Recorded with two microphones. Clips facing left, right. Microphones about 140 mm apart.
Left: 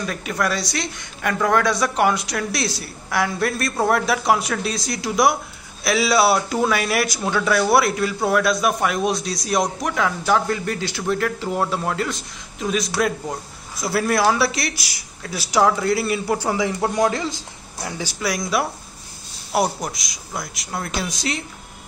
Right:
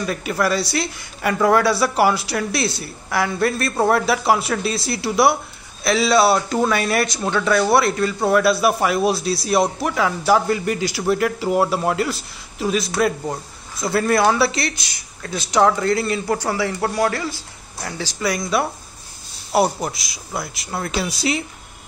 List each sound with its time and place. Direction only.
0.0 s a man's voice: 5° right (ahead or behind)
18.2 s a man's voice: centre (ahead or behind)